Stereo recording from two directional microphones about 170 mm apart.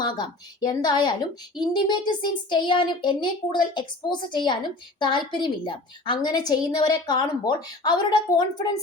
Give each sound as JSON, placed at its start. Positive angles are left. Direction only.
{"t": 0.0, "sound": "a woman's voice", "side_deg": 25}